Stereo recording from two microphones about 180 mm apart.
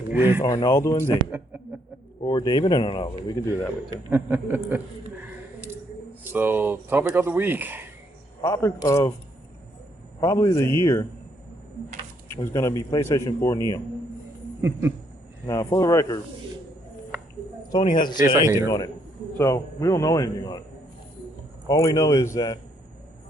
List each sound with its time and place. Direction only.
0.4 s speech: 20° left (ahead or behind)
1.1 s speech: 10° right (ahead or behind)
2.2 s speech: 25° left (ahead or behind)
4.1 s speech: 10° right (ahead or behind)
6.3 s speech: 10° right (ahead or behind)
8.4 s a man's voice: 20° left (ahead or behind)
10.2 s a man's voice: 20° left (ahead or behind)
12.5 s a man's voice: 20° left (ahead or behind)
14.6 s speech: 15° right (ahead or behind)
15.4 s a man's voice: 20° left (ahead or behind)
17.9 s speech: 25° left (ahead or behind)
18.3 s speech: 15° right (ahead or behind)
18.5 s speech: 20° left (ahead or behind)
21.7 s speech: 20° left (ahead or behind)